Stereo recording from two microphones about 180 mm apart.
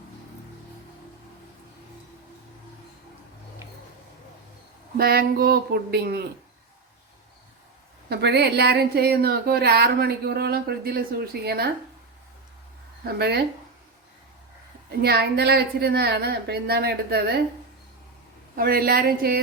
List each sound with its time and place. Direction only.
4.9 s speech: 60° right (ahead or behind)
8.1 s speech: 65° right (ahead or behind)
13.1 s speech: 65° right (ahead or behind)
15.0 s speech: 60° right (ahead or behind)
18.5 s speech: 55° right (ahead or behind)